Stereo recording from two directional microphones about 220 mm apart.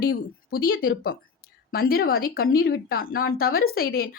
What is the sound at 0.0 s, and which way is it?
A woman's voice, 45° left (ahead or behind).